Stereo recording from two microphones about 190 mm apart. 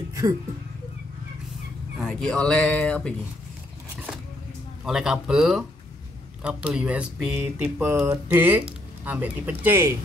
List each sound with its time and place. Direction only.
2.0 s speech: centre (ahead or behind)
4.8 s speech: centre (ahead or behind)